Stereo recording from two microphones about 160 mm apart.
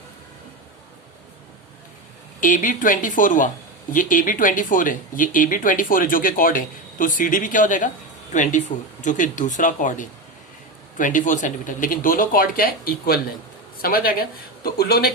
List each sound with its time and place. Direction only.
2.4 s speech: 55° left (ahead or behind); by 15.1 s 75° left (ahead or behind)